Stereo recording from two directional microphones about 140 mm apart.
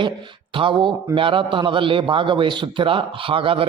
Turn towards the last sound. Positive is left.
turn(degrees=-40)  # may be behind; listen again after turning